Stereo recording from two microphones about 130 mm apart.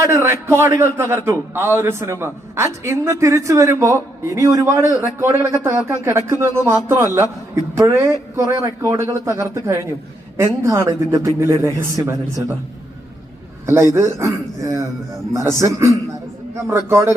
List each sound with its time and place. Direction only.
0.0 s a man's voice: 20° right (ahead or behind)
13.7 s a man's voice: 20° right (ahead or behind)